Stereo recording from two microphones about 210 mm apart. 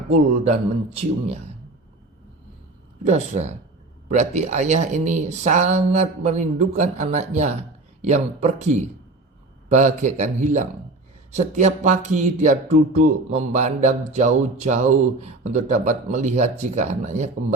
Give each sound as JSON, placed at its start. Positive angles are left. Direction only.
{"t": 0.1, "sound": "speech", "side_deg": -30}
{"t": 3.0, "sound": "speech", "side_deg": -30}